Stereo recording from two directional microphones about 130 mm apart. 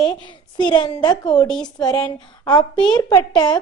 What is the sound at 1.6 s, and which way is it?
A woman's voice, 30° left (ahead or behind).